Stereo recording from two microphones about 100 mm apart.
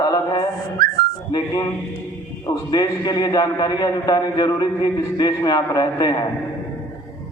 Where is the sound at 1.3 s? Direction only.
45° left (ahead or behind).